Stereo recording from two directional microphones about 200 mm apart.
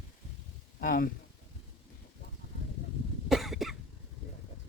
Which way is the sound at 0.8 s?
45° left (ahead or behind).